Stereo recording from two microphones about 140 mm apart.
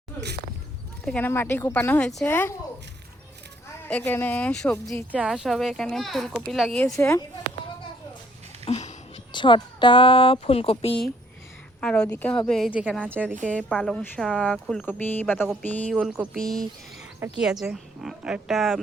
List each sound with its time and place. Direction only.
1.0 s speech: 10° left (ahead or behind)
2.3 s speech: 15° left (ahead or behind)
3.8 s speech: 10° left (ahead or behind)
6.8 s speech: 20° left (ahead or behind)
8.6 s a sound: 55° left (ahead or behind)
9.3 s speech: 35° left (ahead or behind)
11.8 s speech: 5° left (ahead or behind)
13.1 s speech: 15° right (ahead or behind)
13.5 s speech: 5° left (ahead or behind)